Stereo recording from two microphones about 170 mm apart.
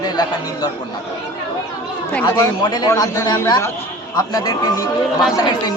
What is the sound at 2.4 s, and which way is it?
A man's voice, 20° left (ahead or behind).